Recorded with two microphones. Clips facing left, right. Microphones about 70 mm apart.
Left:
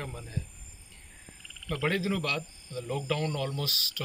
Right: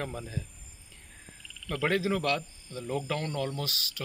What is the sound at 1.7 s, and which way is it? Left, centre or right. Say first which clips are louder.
Speech: right 2 dB; right.